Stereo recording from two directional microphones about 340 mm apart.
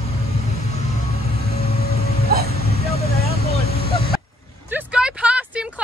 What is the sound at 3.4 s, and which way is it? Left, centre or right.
Vehicle, left.